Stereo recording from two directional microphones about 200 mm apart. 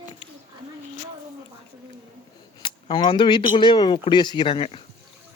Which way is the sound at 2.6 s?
25° left (ahead or behind).